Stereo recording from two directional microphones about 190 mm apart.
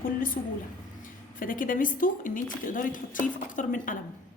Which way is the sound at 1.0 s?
45° left (ahead or behind).